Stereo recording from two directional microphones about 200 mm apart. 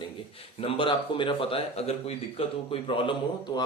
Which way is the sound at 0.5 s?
25° left (ahead or behind).